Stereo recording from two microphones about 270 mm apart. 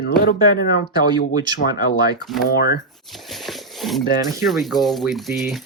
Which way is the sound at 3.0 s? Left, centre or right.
Centre.